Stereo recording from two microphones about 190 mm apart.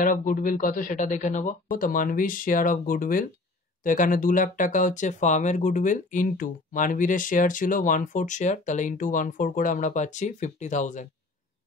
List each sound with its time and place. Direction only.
0.0 s speech: 45° left (ahead or behind)